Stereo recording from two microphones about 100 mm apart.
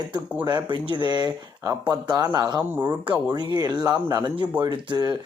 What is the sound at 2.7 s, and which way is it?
Speech, 20° right (ahead or behind).